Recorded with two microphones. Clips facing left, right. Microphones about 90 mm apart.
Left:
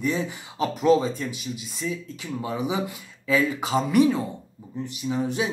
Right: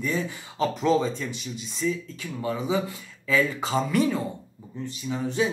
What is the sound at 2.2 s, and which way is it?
Speech, 15° left (ahead or behind).